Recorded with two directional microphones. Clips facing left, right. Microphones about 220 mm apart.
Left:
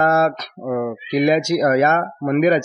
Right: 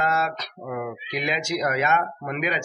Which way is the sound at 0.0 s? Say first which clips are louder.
Left 8 dB; 50° left (ahead or behind).